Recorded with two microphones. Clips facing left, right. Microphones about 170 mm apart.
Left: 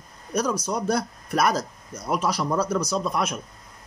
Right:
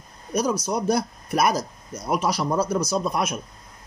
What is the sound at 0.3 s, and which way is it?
Speech, 10° right (ahead or behind).